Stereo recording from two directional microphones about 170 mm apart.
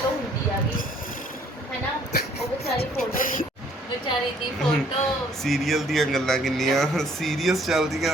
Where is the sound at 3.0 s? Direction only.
55° left (ahead or behind).